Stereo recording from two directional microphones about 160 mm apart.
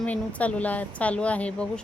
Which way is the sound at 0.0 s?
10° left (ahead or behind).